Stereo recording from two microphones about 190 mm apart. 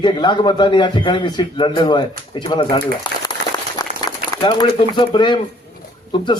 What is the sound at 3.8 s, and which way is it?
A man's voice, 20° left (ahead or behind).